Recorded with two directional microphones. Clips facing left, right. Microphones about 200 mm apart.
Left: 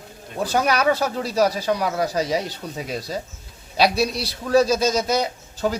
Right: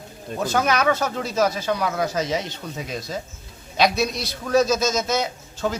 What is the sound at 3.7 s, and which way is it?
A man's voice, 35° left (ahead or behind).